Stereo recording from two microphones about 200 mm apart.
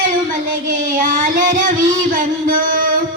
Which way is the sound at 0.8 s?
40° right (ahead or behind).